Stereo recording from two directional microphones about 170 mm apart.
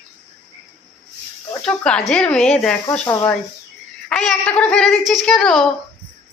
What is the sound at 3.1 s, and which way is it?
Speech, 20° left (ahead or behind).